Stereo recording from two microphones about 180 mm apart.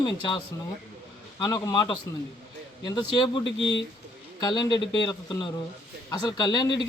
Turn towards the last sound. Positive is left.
turn(degrees=20)  # may be behind; listen again after turning